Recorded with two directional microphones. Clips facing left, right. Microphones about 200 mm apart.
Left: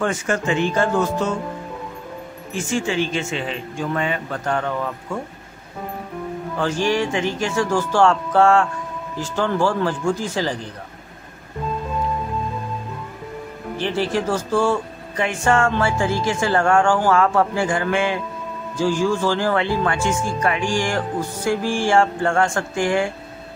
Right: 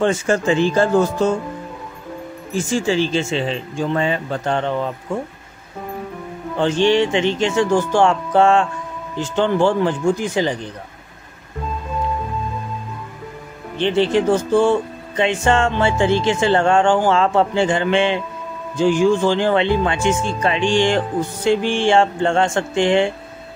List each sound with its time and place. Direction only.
0.0 s speech: 30° right (ahead or behind)
2.5 s speech: 35° right (ahead or behind)
6.5 s speech: 25° right (ahead or behind)
13.7 s speech: 20° right (ahead or behind)